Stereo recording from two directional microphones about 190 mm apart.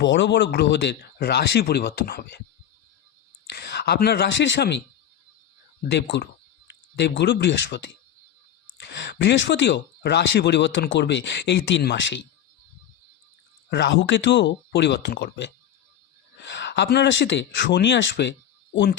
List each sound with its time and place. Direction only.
0.0 s speech: 65° left (ahead or behind)
3.5 s speech: 60° left (ahead or behind)
5.9 s speech: 65° left (ahead or behind)
13.7 s speech: 70° left (ahead or behind)